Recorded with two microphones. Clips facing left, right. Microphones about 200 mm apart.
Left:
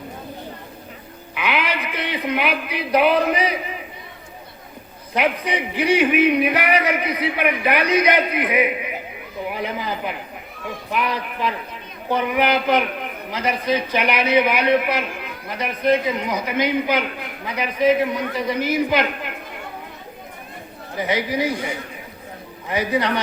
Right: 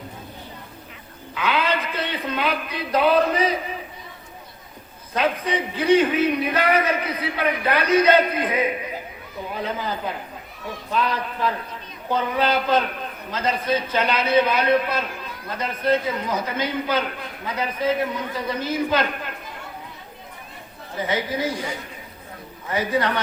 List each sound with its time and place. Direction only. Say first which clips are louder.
1.4 s a man's voice: right 1 dB; 15° left (ahead or behind)
5.1 s a man's voice: left 1 dB; 15° left (ahead or behind)
21.1 s a man's voice: left 3 dB; 15° left (ahead or behind)
22.7 s a man's voice: left 1 dB; 15° left (ahead or behind)